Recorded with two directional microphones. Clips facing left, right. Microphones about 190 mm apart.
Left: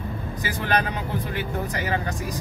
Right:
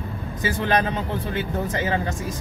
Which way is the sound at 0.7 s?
25° right (ahead or behind).